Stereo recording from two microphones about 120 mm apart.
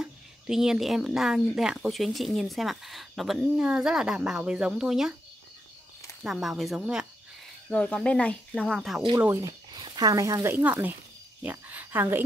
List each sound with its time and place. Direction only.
0.0 s a woman's voice: 5° right (ahead or behind)
6.2 s a woman's voice: 5° right (ahead or behind)
7.7 s speech: 10° left (ahead or behind)
9.4 s speech: 35° right (ahead or behind); by 12.2 s 20° right (ahead or behind)